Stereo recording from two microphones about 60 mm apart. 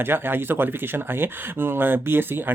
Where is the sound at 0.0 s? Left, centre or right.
Right.